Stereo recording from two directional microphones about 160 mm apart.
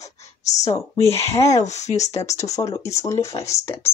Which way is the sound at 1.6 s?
45° left (ahead or behind).